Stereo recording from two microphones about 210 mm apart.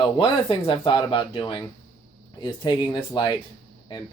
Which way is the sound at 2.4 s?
20° left (ahead or behind).